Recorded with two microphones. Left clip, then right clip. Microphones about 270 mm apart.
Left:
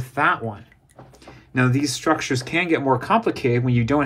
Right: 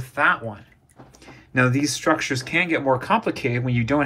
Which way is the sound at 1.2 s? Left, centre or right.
Centre.